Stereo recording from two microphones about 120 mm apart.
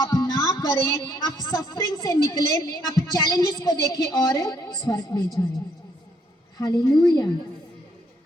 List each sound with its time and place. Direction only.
0.0 s speech: 30° left (ahead or behind)
6.6 s speech: 40° left (ahead or behind)